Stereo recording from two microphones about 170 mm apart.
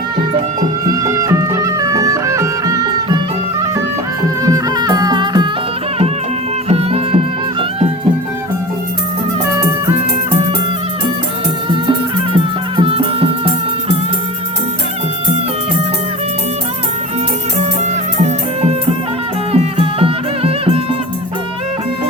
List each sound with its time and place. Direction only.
0.6 s music: 20° right (ahead or behind)
4.4 s music: 20° right (ahead or behind)
6.7 s music: 35° right (ahead or behind)
9.6 s music: 20° right (ahead or behind)
11.7 s music: 30° right (ahead or behind)
18.2 s music: 40° right (ahead or behind)